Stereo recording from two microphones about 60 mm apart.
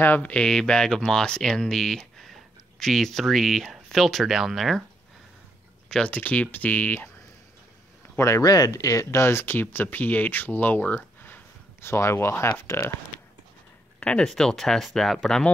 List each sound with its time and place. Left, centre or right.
0.2 s speech: left
0.5 s speech: centre
6.0 s speech: left
8.2 s speech: left
9.2 s speech: left
13.9 s speech: centre